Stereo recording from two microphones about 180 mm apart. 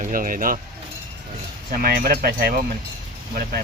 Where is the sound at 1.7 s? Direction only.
55° right (ahead or behind).